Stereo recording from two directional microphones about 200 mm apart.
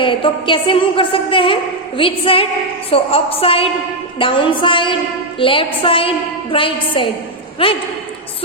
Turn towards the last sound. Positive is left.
turn(degrees=30)  # may be behind; listen again after turning